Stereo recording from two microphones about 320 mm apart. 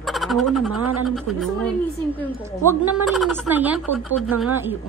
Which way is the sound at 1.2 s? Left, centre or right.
Centre.